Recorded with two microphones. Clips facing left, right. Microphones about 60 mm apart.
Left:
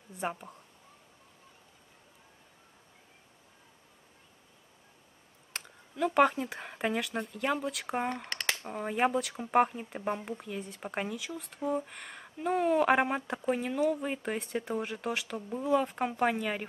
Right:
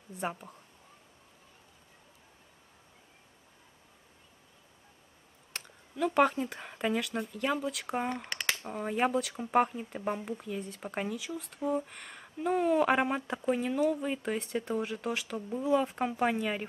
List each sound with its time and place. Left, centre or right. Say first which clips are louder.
0.3 s speech: left 1 dB; centre
5.9 s speech: left 1 dB; centre
8.6 s speech: left 1 dB; centre
9.1 s speech: even; centre
10.8 s speech: left 3 dB; centre
11.1 s speech: right 1 dB; centre